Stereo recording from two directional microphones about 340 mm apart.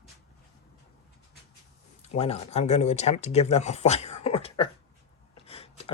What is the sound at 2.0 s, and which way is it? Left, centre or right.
Speech, centre.